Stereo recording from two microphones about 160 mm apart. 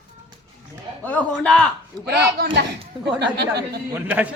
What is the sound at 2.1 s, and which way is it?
Speech, 80° right.